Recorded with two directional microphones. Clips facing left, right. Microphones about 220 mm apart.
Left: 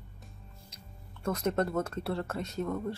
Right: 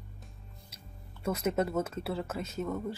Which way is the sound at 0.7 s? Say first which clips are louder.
Even; 10° right (ahead or behind).